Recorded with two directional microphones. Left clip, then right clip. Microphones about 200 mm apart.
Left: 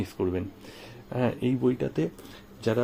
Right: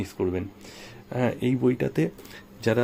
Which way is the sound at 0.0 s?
5° right (ahead or behind).